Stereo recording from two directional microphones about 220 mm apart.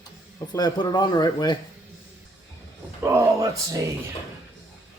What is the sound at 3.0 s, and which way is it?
Speech, 15° right (ahead or behind).